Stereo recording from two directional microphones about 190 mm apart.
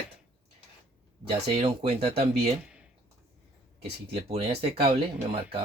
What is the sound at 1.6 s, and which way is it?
Speech, 30° right (ahead or behind).